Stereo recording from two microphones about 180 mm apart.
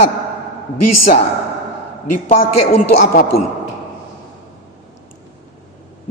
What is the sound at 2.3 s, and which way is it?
A man's voice, 45° left (ahead or behind).